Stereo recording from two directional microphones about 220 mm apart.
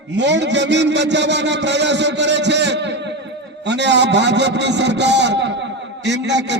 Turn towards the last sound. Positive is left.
turn(degrees=-50)  # may be behind; listen again after turning